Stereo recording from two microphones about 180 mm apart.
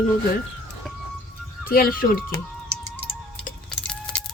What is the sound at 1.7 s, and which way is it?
Speech, 55° left (ahead or behind).